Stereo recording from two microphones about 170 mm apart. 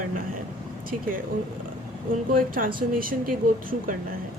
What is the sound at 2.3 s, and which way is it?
Speech, 55° right (ahead or behind).